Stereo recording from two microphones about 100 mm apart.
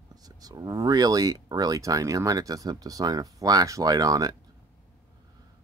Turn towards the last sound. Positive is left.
turn(degrees=-35)  # may be behind; listen again after turning